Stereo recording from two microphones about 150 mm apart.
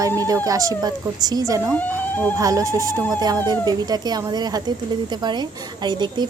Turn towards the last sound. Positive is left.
turn(degrees=-30)  # may be behind; listen again after turning